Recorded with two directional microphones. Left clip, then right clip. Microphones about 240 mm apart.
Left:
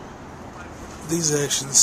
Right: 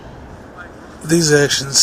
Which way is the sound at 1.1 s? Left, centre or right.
Right.